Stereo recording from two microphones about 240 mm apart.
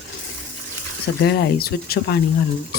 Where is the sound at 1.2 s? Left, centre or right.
Left.